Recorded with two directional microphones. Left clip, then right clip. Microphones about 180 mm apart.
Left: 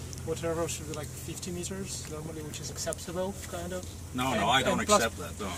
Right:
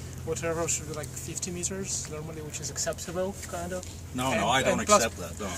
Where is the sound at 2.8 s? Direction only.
15° right (ahead or behind).